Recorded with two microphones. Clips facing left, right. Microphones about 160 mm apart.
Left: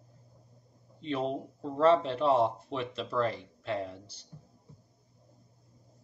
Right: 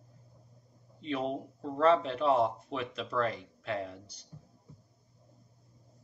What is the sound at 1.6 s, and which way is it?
Speech, 30° left (ahead or behind).